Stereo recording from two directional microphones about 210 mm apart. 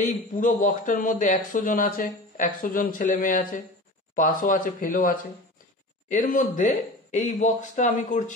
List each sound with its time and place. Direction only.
0.0 s a man's voice: 40° left (ahead or behind)